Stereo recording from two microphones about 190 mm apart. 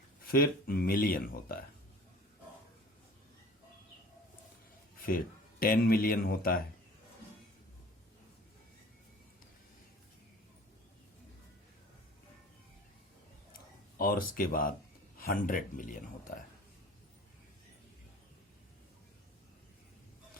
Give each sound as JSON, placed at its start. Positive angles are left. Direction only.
{"t": 0.3, "sound": "speech", "side_deg": 50}
{"t": 4.9, "sound": "speech", "side_deg": 50}
{"t": 14.0, "sound": "speech", "side_deg": 50}